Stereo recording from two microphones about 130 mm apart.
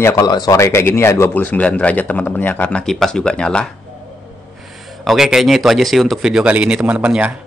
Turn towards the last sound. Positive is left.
turn(degrees=-10)  # may be behind; listen again after turning